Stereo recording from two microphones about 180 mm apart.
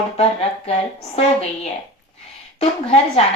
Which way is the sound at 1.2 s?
35° left (ahead or behind).